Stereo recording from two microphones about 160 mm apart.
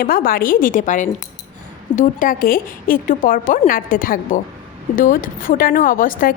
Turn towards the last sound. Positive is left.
turn(degrees=60)  # may be behind; listen again after turning